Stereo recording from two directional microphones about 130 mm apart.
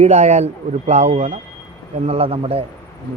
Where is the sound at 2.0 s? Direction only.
50° right (ahead or behind).